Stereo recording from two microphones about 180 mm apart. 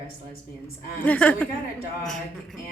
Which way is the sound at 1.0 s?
10° left (ahead or behind).